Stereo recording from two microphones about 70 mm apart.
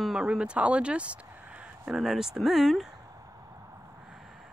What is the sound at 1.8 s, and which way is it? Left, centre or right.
Speech, centre.